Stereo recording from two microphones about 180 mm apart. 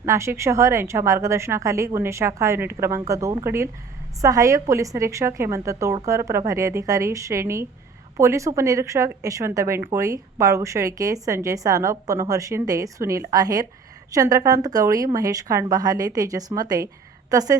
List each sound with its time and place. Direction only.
0.0 s a woman's voice: 15° right (ahead or behind)